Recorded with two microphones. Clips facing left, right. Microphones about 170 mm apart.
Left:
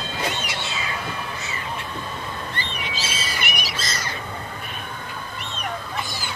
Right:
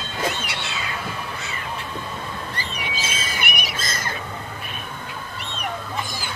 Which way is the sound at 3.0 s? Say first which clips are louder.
Even; 50° right (ahead or behind).